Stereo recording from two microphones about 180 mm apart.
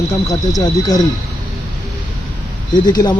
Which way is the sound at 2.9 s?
20° left (ahead or behind).